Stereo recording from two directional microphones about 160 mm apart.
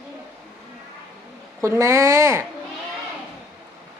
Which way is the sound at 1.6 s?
15° right (ahead or behind).